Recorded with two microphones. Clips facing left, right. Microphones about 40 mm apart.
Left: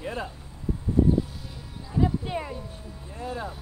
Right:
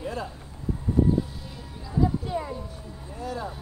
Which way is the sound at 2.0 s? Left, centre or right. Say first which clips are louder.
Right 1 dB; left.